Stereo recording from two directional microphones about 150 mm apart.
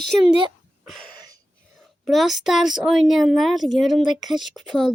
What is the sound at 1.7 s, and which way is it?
A woman's voice, centre (ahead or behind).